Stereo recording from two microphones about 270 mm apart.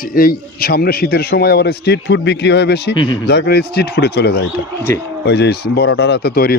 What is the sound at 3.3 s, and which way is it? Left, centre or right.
Speech, left.